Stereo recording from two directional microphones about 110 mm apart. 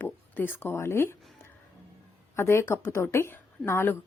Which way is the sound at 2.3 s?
25° left (ahead or behind).